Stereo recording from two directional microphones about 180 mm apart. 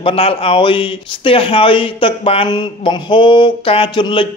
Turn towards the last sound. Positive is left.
turn(degrees=30)  # may be behind; listen again after turning